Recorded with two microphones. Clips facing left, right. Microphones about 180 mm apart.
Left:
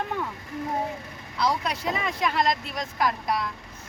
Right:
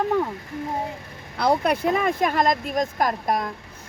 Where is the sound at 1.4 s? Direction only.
55° right (ahead or behind).